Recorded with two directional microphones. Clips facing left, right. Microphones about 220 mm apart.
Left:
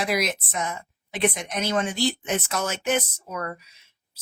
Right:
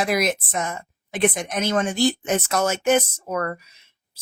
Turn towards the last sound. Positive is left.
turn(degrees=-55)  # may be behind; listen again after turning